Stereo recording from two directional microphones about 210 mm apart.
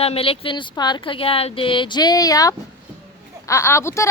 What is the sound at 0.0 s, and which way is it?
Speech, 25° left (ahead or behind).